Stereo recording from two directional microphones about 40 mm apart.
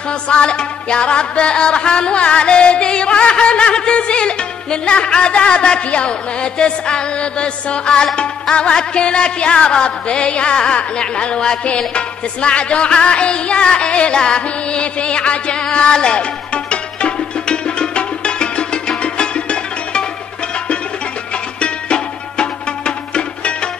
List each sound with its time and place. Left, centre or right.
0.3 s music: left
21.5 s music: left